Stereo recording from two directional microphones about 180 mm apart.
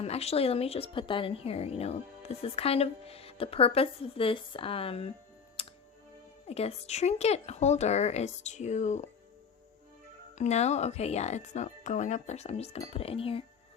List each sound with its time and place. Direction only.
0.0 s a woman's voice: 35° left (ahead or behind)
5.6 s music: 30° left (ahead or behind)
6.5 s a woman's voice: 35° left (ahead or behind)
10.3 s a woman's voice: 40° left (ahead or behind)